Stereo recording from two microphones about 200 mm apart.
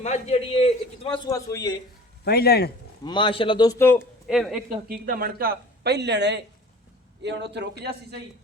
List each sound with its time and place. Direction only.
0.0 s a man's voice: 35° left (ahead or behind); by 1.7 s 15° left (ahead or behind)
2.2 s speech: 50° left (ahead or behind)
3.0 s a man's voice: 25° left (ahead or behind)
4.3 s speech: centre (ahead or behind)
5.0 s a man's voice: 45° right (ahead or behind)